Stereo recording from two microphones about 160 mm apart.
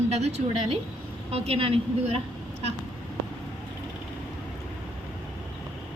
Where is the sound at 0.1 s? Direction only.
45° right (ahead or behind).